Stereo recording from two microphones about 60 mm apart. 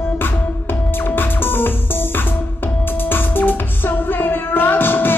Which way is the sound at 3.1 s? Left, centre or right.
Left.